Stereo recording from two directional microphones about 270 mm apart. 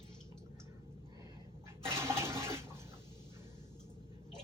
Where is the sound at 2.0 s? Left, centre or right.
Centre.